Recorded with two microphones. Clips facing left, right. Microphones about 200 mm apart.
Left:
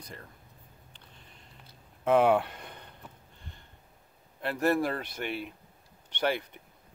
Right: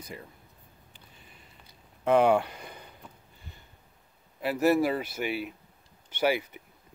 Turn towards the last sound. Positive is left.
turn(degrees=-5)  # may be behind; listen again after turning